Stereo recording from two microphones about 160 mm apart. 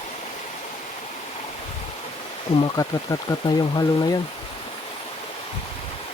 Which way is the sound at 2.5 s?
30° left (ahead or behind).